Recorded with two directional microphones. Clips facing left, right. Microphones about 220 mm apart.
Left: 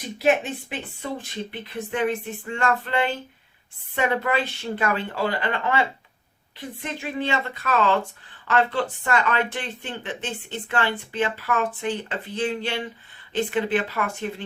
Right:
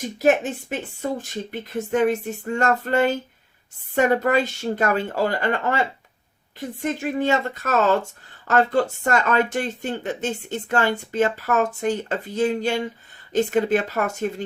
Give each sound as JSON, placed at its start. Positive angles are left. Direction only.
{"t": 0.0, "sound": "speech", "side_deg": -45}